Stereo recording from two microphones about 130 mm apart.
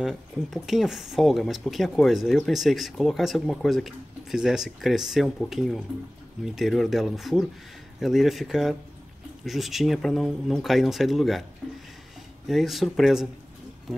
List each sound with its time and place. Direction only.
0.0 s speech: centre (ahead or behind)
12.4 s speech: centre (ahead or behind)